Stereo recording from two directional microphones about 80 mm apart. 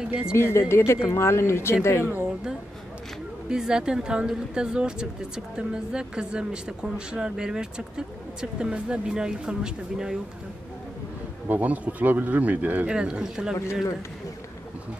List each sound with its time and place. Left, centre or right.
0.0 s speech: centre
0.3 s speech: left
3.4 s speech: centre
11.4 s speech: right